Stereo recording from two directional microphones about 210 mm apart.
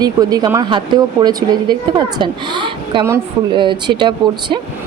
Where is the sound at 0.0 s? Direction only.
20° right (ahead or behind).